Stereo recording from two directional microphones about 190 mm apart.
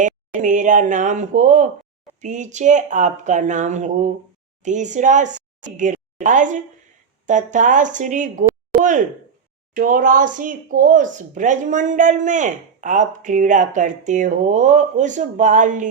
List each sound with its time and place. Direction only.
0.0 s a woman's voice: 40° right (ahead or behind)